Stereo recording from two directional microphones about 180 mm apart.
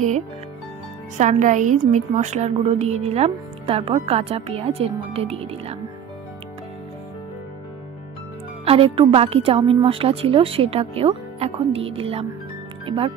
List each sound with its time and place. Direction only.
1.1 s a woman's voice: 45° right (ahead or behind)
8.6 s a woman's voice: 30° right (ahead or behind)